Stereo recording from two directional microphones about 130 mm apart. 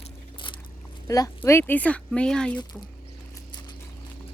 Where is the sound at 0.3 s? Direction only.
40° left (ahead or behind).